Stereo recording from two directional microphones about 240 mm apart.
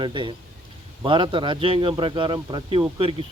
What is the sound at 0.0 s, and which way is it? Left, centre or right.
Speech, centre.